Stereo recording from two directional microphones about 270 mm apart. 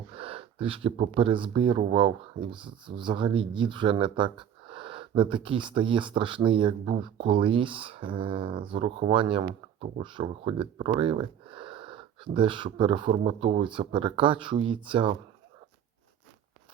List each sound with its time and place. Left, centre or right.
0.1 s speech: right